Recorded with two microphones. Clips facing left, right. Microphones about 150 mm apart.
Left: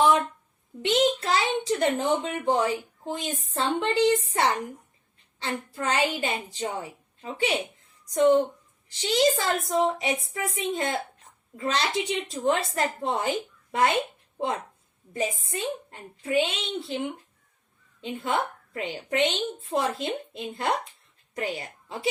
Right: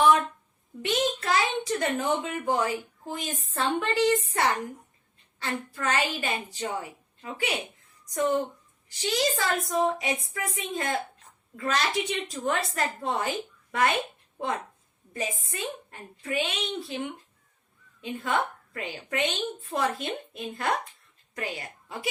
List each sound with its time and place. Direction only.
0.8 s a child's voice: 25° left (ahead or behind)
9.0 s a child's voice: 25° left (ahead or behind)
15.1 s a child's voice: 25° left (ahead or behind)